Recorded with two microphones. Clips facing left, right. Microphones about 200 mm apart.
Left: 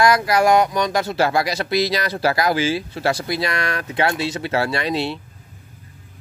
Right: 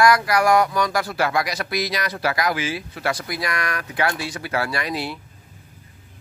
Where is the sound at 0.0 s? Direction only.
25° left (ahead or behind).